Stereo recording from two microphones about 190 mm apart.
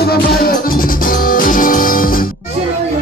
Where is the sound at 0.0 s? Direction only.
55° left (ahead or behind).